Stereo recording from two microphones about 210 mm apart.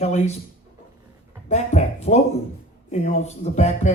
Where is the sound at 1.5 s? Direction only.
35° left (ahead or behind).